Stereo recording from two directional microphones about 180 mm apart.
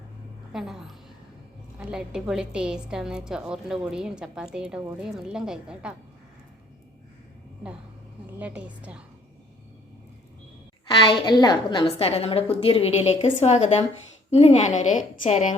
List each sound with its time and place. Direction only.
0.5 s a woman's voice: 5° right (ahead or behind)
8.4 s a woman's voice: 10° right (ahead or behind)
11.1 s a woman's voice: 25° left (ahead or behind); by 15.5 s 40° left (ahead or behind)